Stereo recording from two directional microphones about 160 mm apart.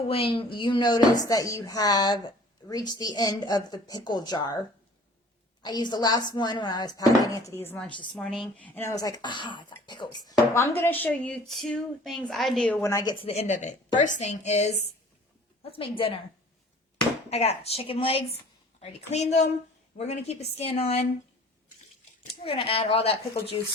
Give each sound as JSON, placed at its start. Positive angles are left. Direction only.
{"t": 0.1, "sound": "speech", "side_deg": 35}
{"t": 5.6, "sound": "speech", "side_deg": 25}
{"t": 8.1, "sound": "a woman's voice", "side_deg": 0}
{"t": 12.8, "sound": "speech", "side_deg": 20}
{"t": 13.2, "sound": "a woman's voice", "side_deg": 40}
{"t": 17.2, "sound": "a woman's voice", "side_deg": 40}
{"t": 22.3, "sound": "speech", "side_deg": 35}